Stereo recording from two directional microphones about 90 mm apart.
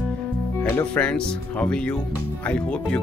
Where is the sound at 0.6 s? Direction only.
30° left (ahead or behind).